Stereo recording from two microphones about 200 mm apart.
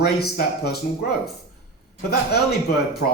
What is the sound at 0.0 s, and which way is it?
Speech, 55° left (ahead or behind).